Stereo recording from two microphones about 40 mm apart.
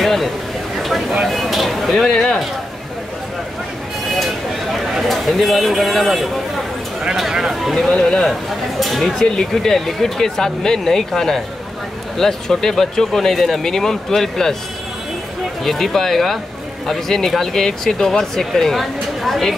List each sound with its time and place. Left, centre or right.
0.0 s a sound: centre
2.0 s speech: centre
5.0 s speech: centre
7.2 s speech: centre
7.9 s speech: centre
8.2 s speech: centre
9.2 s speech: centre
15.6 s speech: centre